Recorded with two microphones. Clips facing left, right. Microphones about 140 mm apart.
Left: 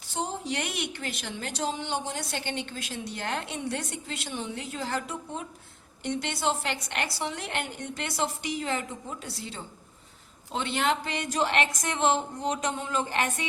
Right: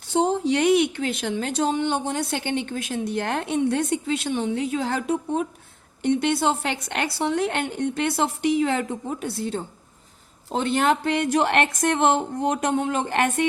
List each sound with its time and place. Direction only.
0.1 s a woman's voice: 65° right (ahead or behind)